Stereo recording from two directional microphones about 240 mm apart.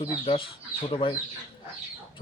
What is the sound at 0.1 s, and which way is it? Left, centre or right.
Speech, left.